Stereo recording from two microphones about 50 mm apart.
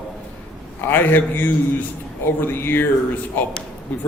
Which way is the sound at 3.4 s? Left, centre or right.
Left.